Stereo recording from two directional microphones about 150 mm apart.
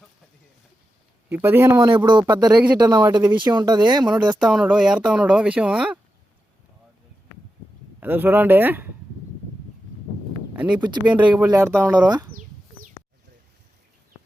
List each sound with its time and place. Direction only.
1.3 s speech: 15° right (ahead or behind)
1.9 s speech: 30° right (ahead or behind)
2.5 s speech: 5° right (ahead or behind)
2.7 s speech: 25° right (ahead or behind)
4.4 s speech: 5° right (ahead or behind)
8.0 s speech: 15° right (ahead or behind)
10.5 s a sound: 10° right (ahead or behind)
10.8 s speech: 30° right (ahead or behind)
11.4 s speech: 20° right (ahead or behind)